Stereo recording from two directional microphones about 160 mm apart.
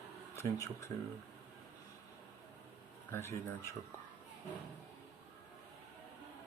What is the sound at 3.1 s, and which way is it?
Speech, 15° left (ahead or behind).